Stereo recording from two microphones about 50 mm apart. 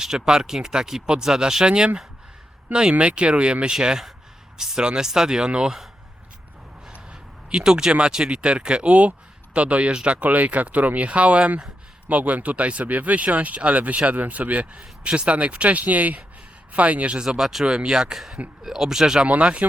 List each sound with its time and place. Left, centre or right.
0.0 s speech: centre
2.9 s speech: right
3.8 s speech: centre
6.9 s speech: centre
17.2 s speech: centre
19.3 s speech: right